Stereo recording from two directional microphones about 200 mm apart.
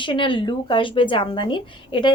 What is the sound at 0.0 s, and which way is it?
Speech, 25° left (ahead or behind).